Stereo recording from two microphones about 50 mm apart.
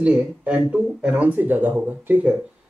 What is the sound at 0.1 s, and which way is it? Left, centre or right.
Speech, right.